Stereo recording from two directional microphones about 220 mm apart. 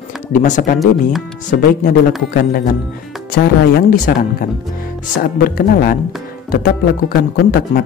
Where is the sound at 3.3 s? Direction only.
40° left (ahead or behind).